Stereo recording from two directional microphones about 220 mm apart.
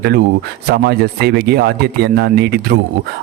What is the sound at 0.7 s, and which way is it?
A man's voice, 45° right (ahead or behind).